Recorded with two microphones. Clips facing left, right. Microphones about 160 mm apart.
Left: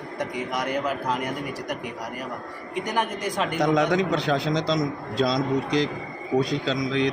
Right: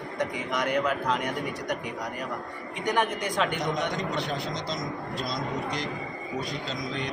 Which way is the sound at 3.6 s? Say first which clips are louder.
Left 8 dB; 90° left.